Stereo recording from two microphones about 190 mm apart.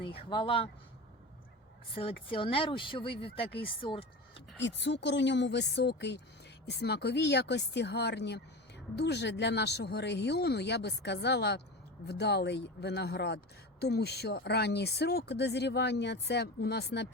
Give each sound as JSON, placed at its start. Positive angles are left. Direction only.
{"t": 0.0, "sound": "speech", "side_deg": 25}
{"t": 2.0, "sound": "speech", "side_deg": 30}
{"t": 4.5, "sound": "a woman's voice", "side_deg": 65}